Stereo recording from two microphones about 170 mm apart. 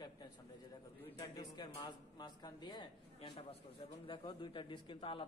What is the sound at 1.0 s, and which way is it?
A man's voice, 20° left (ahead or behind).